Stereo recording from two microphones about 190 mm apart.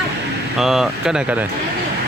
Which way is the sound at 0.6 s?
Centre (ahead or behind).